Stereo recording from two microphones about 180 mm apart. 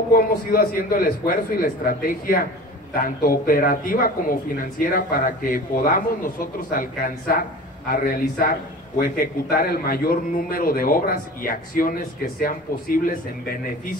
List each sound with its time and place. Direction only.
0.1 s a man's voice: 50° left (ahead or behind)